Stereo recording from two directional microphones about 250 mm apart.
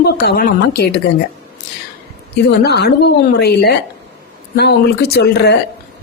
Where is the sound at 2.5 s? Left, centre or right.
Left.